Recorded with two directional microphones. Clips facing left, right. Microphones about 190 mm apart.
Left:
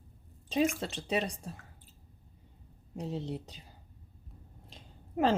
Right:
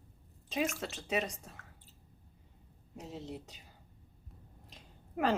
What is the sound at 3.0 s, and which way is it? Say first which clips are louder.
Speech: left 7 dB; 30° left (ahead or behind).